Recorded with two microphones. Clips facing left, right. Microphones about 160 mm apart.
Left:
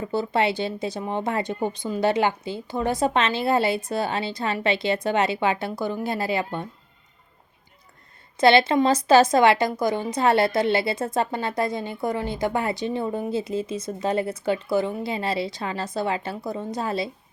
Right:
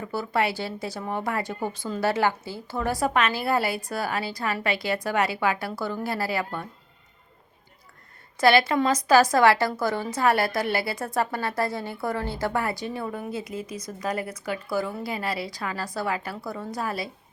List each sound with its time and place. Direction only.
0.0 s a woman's voice: 25° left (ahead or behind)
8.4 s a woman's voice: 25° left (ahead or behind)